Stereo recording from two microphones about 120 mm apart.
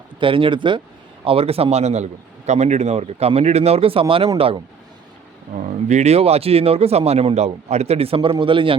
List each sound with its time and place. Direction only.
0.2 s speech: 45° right (ahead or behind)
5.5 s speech: 80° right; by 8.7 s 45° right (ahead or behind)